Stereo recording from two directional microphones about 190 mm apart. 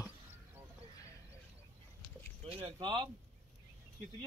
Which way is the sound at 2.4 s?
25° right (ahead or behind).